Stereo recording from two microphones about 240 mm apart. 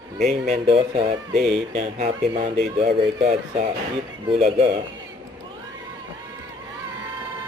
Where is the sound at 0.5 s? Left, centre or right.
Right.